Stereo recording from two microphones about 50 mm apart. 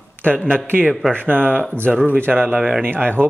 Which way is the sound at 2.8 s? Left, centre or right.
Right.